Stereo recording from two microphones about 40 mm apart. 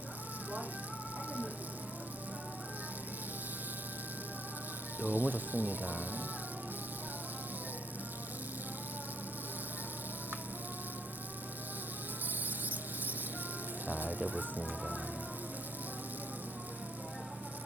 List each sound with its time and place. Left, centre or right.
4.9 s speech: right
12.3 s mouse: right
13.8 s music: right
14.3 s speech: right